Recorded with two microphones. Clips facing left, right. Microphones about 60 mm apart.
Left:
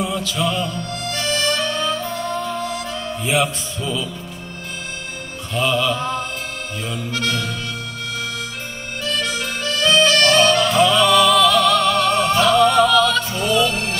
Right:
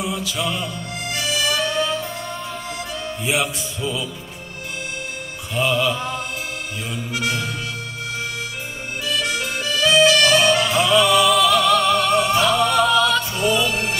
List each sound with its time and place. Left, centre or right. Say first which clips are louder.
0.0 s music: left 3 dB; centre
5.5 s music: left 1 dB; centre
9.0 s music: even; centre